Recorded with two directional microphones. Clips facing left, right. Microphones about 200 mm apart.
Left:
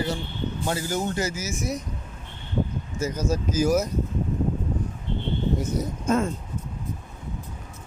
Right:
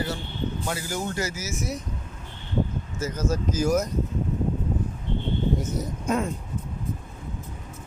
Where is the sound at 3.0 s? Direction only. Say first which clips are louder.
Left 1 dB; 10° left (ahead or behind).